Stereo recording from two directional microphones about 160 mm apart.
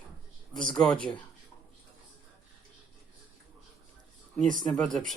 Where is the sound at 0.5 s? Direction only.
5° left (ahead or behind).